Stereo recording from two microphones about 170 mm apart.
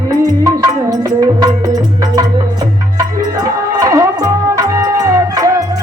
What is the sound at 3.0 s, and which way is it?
Music, 20° right (ahead or behind).